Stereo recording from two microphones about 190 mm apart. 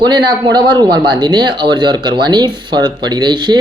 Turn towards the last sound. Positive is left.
turn(degrees=-20)  # may be behind; listen again after turning